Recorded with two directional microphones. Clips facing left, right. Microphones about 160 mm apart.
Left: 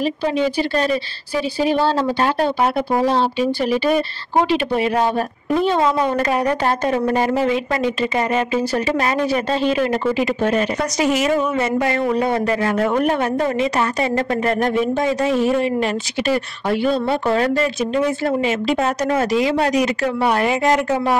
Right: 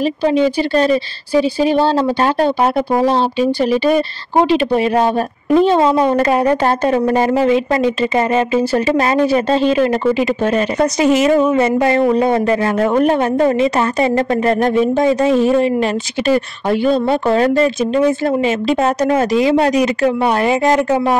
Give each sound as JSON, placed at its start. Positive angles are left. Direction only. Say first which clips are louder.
{"t": 0.0, "sound": "a woman's voice", "louder": "right 5 dB", "side_deg": -25}